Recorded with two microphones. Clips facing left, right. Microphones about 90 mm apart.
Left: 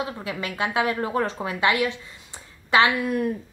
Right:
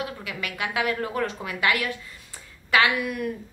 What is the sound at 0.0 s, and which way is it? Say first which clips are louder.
A woman's voice: left 3 dB; 30° left (ahead or behind).